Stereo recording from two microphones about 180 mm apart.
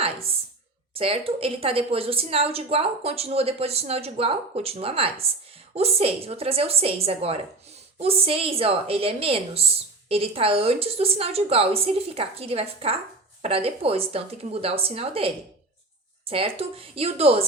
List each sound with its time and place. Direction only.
0.9 s a woman's voice: 30° right (ahead or behind)